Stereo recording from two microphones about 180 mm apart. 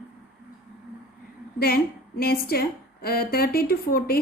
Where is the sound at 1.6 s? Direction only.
55° left (ahead or behind).